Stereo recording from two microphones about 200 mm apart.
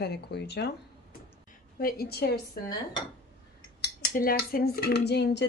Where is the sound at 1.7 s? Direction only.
50° left (ahead or behind).